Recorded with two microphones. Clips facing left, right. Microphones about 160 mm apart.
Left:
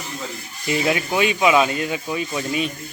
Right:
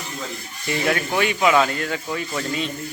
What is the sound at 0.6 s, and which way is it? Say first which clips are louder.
Speech: left 1 dB; 15° left (ahead or behind).